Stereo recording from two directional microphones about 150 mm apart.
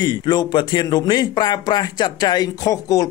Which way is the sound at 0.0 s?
30° left (ahead or behind).